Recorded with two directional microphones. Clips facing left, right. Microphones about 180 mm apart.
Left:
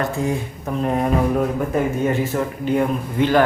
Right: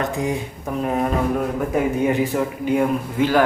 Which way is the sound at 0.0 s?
15° right (ahead or behind).